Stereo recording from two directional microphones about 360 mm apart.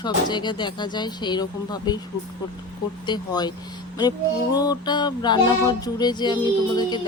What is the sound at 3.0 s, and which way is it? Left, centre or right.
Speech, centre.